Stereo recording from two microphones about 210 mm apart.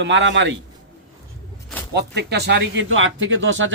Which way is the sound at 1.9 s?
50° right (ahead or behind).